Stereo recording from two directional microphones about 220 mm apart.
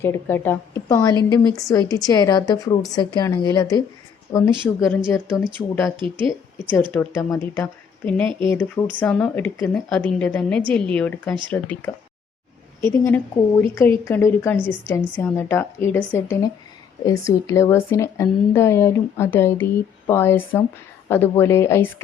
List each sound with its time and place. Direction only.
0.0 s a woman's voice: 10° left (ahead or behind)
4.8 s speech: centre (ahead or behind)
6.0 s speech: 20° right (ahead or behind)
6.9 s a woman's voice: 10° left (ahead or behind)